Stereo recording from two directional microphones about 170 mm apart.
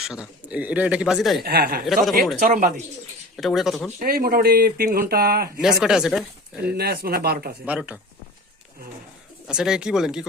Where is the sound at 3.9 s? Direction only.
60° right (ahead or behind).